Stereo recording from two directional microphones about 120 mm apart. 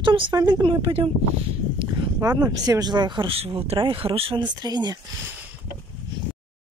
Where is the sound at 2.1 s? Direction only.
35° right (ahead or behind); by 4.4 s 50° right (ahead or behind).